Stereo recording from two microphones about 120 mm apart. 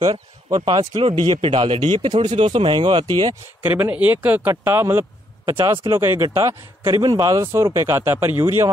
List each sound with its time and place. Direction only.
0.0 s speech: 40° right (ahead or behind)
3.6 s speech: 20° right (ahead or behind)